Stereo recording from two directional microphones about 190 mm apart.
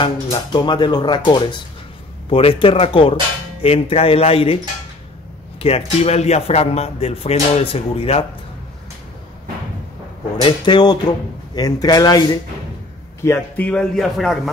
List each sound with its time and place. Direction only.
0.0 s speech: 25° left (ahead or behind)
5.6 s speech: 30° left (ahead or behind)
10.3 s speech: 25° left (ahead or behind); by 14.5 s centre (ahead or behind)